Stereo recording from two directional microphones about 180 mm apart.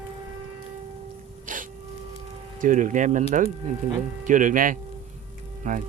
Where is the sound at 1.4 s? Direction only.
45° right (ahead or behind).